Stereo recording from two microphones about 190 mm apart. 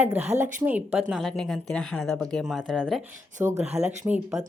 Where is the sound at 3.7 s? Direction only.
35° right (ahead or behind).